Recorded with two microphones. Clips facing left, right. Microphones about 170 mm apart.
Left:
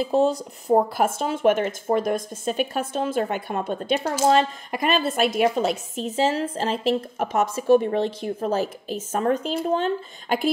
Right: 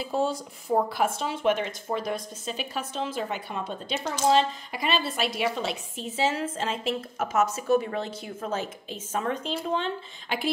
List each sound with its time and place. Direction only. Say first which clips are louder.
0.1 s a woman's voice: left 5 dB; 35° left (ahead or behind)